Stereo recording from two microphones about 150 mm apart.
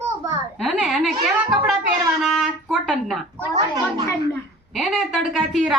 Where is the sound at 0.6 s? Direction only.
Centre (ahead or behind).